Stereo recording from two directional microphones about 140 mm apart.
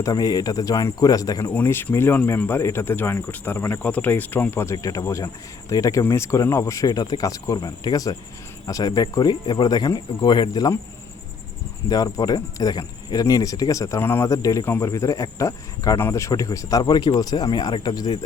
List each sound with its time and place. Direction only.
0.0 s speech: 25° left (ahead or behind)
11.9 s speech: 25° left (ahead or behind)